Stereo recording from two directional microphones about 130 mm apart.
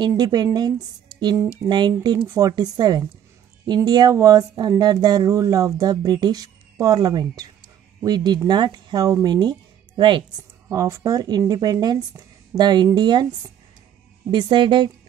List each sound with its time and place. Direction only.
0.2 s a woman's voice: 30° right (ahead or behind)
2.1 s a woman's voice: 20° right (ahead or behind); by 10.2 s 35° right (ahead or behind)
10.7 s speech: 25° right (ahead or behind)
14.3 s a woman's voice: 40° right (ahead or behind)